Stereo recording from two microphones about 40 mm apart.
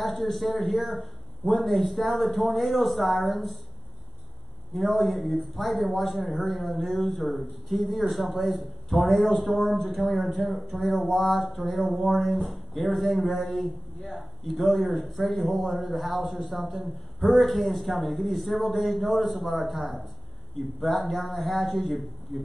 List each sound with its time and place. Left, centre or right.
0.0 s speech: centre
4.7 s speech: centre